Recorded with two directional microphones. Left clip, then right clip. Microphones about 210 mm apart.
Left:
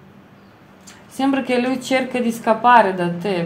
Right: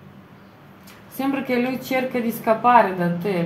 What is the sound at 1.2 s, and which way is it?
Speech, 40° left (ahead or behind).